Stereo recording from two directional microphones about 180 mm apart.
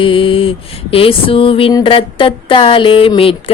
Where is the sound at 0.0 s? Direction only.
30° left (ahead or behind).